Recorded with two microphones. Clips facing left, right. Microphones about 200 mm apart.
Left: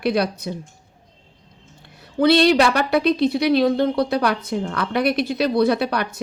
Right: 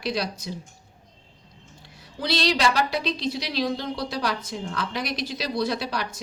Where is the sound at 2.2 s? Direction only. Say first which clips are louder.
Left 9 dB; 55° left (ahead or behind).